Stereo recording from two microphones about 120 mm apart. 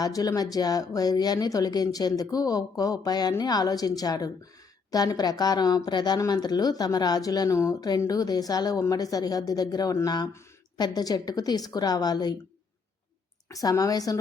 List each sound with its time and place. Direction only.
0.0 s speech: 30° left (ahead or behind)
13.5 s speech: 30° left (ahead or behind)